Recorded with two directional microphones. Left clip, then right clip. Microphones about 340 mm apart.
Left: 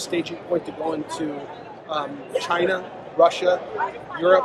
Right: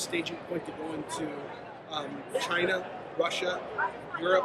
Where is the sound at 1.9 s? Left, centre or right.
Centre.